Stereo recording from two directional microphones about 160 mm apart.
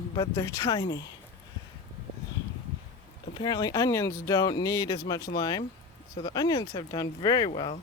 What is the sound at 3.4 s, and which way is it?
Speech, 25° left (ahead or behind).